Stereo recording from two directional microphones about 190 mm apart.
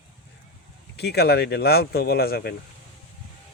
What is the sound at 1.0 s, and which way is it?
A man's voice, 60° left (ahead or behind).